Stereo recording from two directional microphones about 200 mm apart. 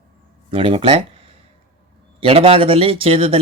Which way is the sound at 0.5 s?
25° right (ahead or behind).